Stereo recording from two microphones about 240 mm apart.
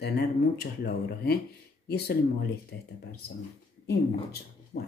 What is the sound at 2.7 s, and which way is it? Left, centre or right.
Speech, left.